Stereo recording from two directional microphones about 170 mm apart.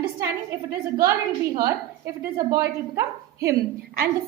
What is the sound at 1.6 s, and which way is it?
A woman's voice, 15° right (ahead or behind).